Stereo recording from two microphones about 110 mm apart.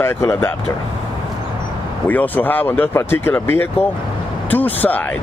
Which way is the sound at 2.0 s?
15° left (ahead or behind).